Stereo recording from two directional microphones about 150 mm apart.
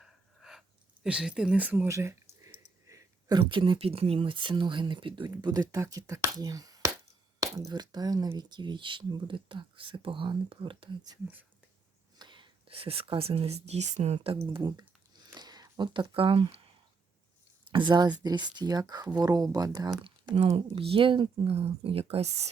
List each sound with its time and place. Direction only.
0.0 s a sound: 5° right (ahead or behind)
1.0 s speech: 5° right (ahead or behind); by 11.2 s 30° right (ahead or behind)
12.2 s speech: 30° right (ahead or behind)
14.6 s a sound: 25° right (ahead or behind)
17.7 s speech: 30° right (ahead or behind)
20.1 s speech: 40° right (ahead or behind)